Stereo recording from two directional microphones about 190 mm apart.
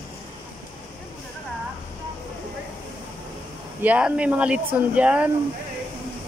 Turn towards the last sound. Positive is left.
turn(degrees=-5)  # may be behind; listen again after turning